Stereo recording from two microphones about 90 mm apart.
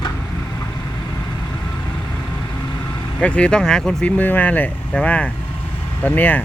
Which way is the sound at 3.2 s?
15° left (ahead or behind).